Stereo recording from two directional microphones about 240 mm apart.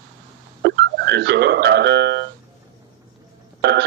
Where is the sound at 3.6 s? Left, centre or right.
Right.